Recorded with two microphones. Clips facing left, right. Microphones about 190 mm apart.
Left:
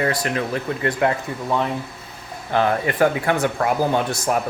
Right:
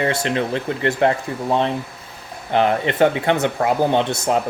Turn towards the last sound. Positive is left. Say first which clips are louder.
# right 2 dB
turn(degrees=-25)  # may be behind; listen again after turning